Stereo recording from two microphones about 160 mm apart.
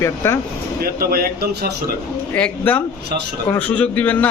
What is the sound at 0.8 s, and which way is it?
Speech, 70° right (ahead or behind).